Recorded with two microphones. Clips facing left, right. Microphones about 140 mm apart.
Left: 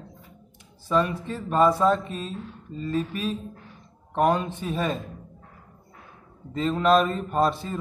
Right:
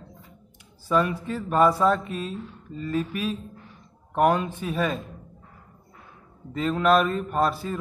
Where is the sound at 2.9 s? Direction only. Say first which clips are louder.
Even; 10° right (ahead or behind).